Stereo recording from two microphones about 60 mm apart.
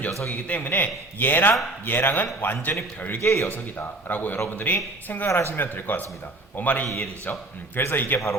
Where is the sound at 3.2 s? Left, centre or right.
Left.